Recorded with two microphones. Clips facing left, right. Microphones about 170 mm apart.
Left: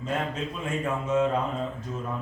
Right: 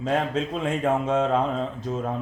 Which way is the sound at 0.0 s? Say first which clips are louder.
Right 5 dB; 90° right.